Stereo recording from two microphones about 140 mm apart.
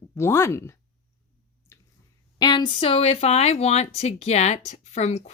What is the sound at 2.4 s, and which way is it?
Speech, 30° left (ahead or behind).